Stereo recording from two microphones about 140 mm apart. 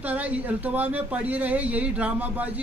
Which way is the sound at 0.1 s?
10° right (ahead or behind).